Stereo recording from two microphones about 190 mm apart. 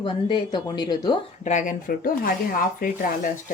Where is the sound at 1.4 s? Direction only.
40° left (ahead or behind).